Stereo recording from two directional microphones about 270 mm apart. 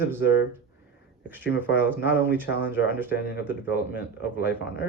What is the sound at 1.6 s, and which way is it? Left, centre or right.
Speech, centre.